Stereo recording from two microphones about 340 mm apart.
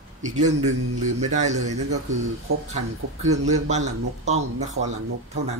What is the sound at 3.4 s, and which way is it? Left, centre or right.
Speech, centre.